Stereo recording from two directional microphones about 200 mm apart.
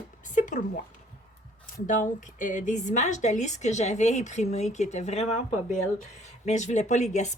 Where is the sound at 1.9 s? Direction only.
40° left (ahead or behind).